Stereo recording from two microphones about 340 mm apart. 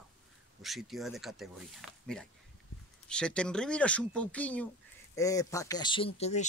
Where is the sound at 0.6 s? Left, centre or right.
Centre.